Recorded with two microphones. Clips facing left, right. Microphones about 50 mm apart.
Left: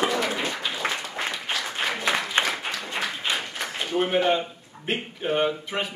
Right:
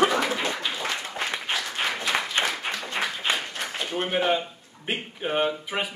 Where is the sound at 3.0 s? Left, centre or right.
Centre.